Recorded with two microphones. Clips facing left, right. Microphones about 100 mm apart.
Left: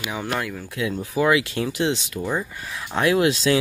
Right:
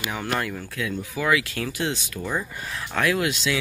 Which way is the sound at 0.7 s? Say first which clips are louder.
Left 7 dB; 25° left (ahead or behind).